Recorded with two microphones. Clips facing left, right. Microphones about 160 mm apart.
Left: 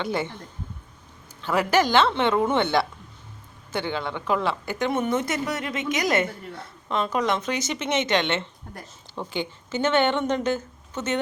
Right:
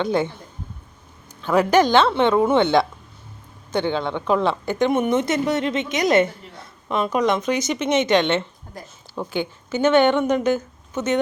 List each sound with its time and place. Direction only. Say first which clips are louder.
0.0 s a woman's voice: right 6 dB; 15° right (ahead or behind)
1.5 s a woman's voice: right 5 dB; 15° right (ahead or behind)